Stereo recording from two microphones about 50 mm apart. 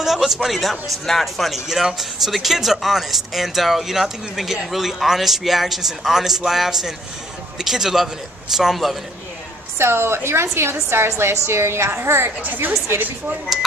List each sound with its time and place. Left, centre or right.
0.0 s a man's voice: centre
9.8 s a woman's voice: right
12.4 s a woman's voice: right